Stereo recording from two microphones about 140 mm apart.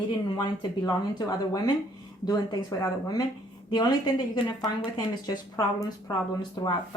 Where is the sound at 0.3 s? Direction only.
30° left (ahead or behind).